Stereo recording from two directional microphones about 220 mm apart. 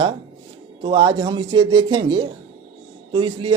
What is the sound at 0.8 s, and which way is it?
Speech, 20° right (ahead or behind).